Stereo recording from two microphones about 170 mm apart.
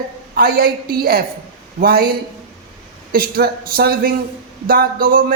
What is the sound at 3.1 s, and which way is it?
A man's voice, 60° right (ahead or behind).